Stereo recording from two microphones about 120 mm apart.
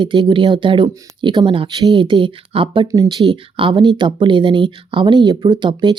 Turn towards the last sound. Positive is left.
turn(degrees=-40)  # may be behind; listen again after turning